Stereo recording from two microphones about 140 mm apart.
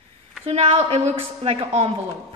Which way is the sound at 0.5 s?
40° right (ahead or behind).